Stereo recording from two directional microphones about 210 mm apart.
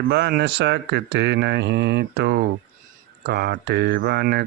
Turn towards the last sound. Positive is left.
turn(degrees=-50)  # may be behind; listen again after turning